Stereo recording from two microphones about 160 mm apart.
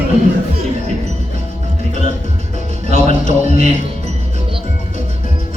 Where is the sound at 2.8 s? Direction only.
40° right (ahead or behind).